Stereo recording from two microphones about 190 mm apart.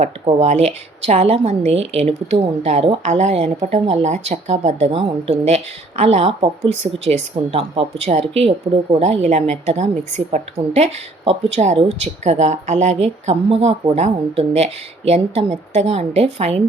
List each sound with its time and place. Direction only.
0.0 s a woman's voice: 35° right (ahead or behind)